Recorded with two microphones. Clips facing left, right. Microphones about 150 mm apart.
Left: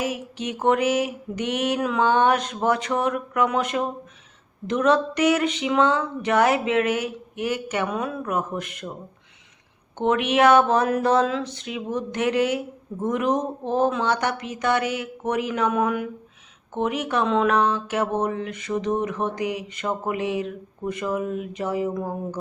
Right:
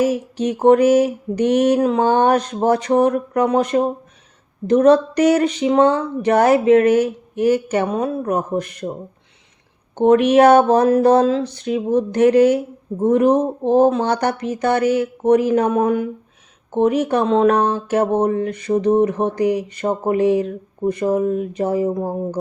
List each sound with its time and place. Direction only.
0.0 s speech: 35° right (ahead or behind)
10.0 s speech: 40° right (ahead or behind)